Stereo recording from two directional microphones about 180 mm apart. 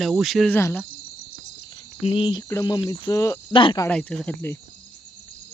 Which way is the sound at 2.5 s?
20° left (ahead or behind).